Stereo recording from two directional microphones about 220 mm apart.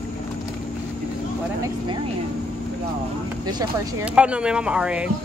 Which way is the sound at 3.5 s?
20° right (ahead or behind).